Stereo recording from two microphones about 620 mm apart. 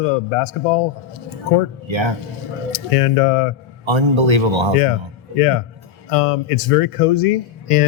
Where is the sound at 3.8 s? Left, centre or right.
Right.